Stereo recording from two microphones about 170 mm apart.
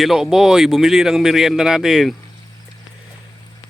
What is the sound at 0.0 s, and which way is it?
Speech, centre (ahead or behind).